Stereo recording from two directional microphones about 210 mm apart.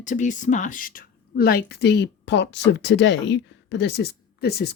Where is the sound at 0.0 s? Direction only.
35° left (ahead or behind).